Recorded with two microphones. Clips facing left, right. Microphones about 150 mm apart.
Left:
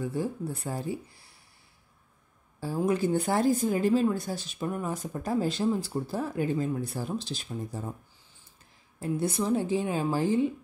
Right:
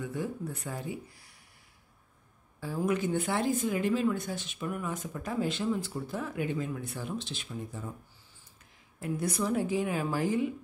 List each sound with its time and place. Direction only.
0.0 s a woman's voice: 35° left (ahead or behind)
2.6 s a woman's voice: 35° left (ahead or behind)
9.0 s a woman's voice: 30° left (ahead or behind)